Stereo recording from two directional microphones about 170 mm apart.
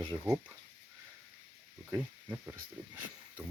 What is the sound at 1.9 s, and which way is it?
Speech, 10° right (ahead or behind).